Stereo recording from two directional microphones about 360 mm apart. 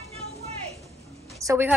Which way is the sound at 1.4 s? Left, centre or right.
Centre.